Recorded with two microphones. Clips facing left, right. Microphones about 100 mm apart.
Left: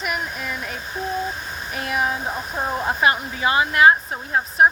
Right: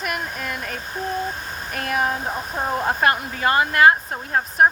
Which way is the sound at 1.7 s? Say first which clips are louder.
Right 1 dB; 50° right (ahead or behind).